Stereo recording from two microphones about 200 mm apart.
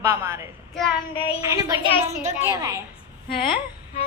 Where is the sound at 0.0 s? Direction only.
15° right (ahead or behind).